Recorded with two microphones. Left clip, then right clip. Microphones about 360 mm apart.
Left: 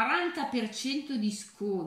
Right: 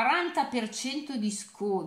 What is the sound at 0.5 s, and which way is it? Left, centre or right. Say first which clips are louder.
Speech: even; centre.